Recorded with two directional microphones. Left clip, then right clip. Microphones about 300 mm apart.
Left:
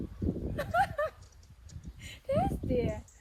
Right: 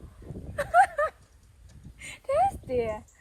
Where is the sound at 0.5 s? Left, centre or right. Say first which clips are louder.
Right 9 dB; centre.